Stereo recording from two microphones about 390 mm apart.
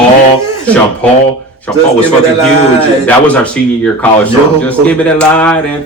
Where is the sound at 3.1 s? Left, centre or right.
Centre.